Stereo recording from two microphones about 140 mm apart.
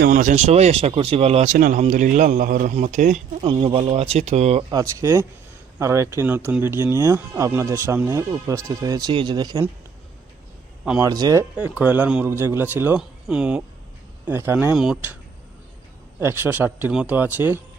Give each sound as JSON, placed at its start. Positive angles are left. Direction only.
{"t": 0.1, "sound": "speech", "side_deg": -65}
{"t": 1.5, "sound": "speech", "side_deg": -85}
{"t": 1.9, "sound": "a man's voice", "side_deg": -70}
{"t": 2.6, "sound": "speech", "side_deg": -55}
{"t": 3.4, "sound": "speech", "side_deg": -40}
{"t": 4.7, "sound": "speech", "side_deg": -25}
{"t": 11.0, "sound": "speech", "side_deg": -25}
{"t": 11.5, "sound": "a man's voice", "side_deg": -10}
{"t": 16.2, "sound": "a man's voice", "side_deg": -15}